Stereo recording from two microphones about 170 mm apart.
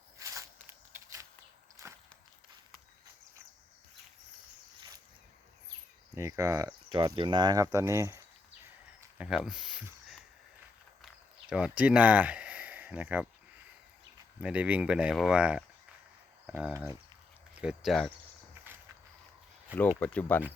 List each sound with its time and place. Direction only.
0.2 s a sound: 20° right (ahead or behind)
1.8 s walk: 20° right (ahead or behind)
6.1 s speech: 20° right (ahead or behind)
8.6 s a sound: 10° right (ahead or behind)
14.4 s speech: 10° right (ahead or behind)
17.6 s speech: 5° right (ahead or behind)
20.0 s speech: 10° left (ahead or behind)